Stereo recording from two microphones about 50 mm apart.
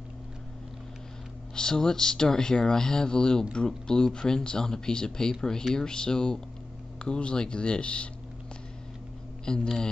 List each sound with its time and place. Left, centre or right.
1.5 s speech: centre
9.5 s speech: centre